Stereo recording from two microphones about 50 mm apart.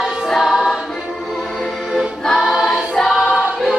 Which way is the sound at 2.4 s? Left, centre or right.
Centre.